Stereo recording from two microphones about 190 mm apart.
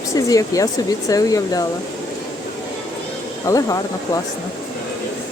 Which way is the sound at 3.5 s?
20° left (ahead or behind).